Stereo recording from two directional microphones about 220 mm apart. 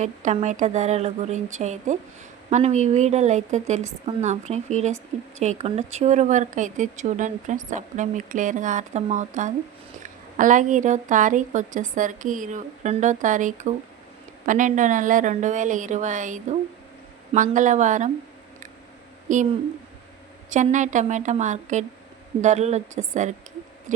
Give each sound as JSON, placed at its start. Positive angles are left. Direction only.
{"t": 0.0, "sound": "speech", "side_deg": -35}
{"t": 19.3, "sound": "speech", "side_deg": -35}
{"t": 20.5, "sound": "speech", "side_deg": -35}